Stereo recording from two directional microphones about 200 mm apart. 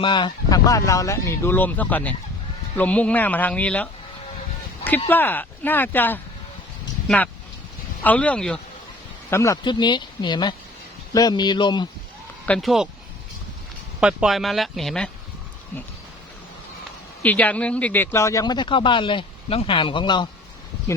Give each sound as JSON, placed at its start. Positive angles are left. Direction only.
{"t": 0.0, "sound": "speech", "side_deg": 25}
{"t": 5.0, "sound": "speech", "side_deg": 10}
{"t": 8.0, "sound": "speech", "side_deg": 5}
{"t": 12.5, "sound": "speech", "side_deg": 0}
{"t": 14.0, "sound": "speech", "side_deg": -5}
{"t": 17.2, "sound": "speech", "side_deg": 5}